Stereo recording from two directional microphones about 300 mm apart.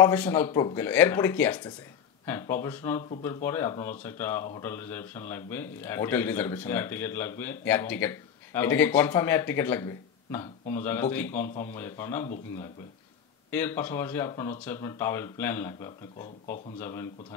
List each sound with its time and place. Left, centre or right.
0.0 s a man's voice: centre
13.5 s a man's voice: centre
16.2 s speech: left
16.7 s a man's voice: centre